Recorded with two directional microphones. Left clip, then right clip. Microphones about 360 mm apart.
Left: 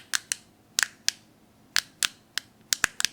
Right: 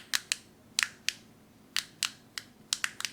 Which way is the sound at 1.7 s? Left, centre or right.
Left.